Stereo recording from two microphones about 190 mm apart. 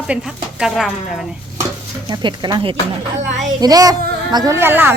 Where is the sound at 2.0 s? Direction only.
25° right (ahead or behind).